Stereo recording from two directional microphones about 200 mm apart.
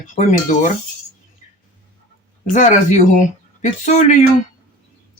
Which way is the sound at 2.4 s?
35° left (ahead or behind).